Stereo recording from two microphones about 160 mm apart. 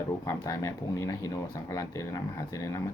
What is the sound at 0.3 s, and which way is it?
Speech, 20° left (ahead or behind).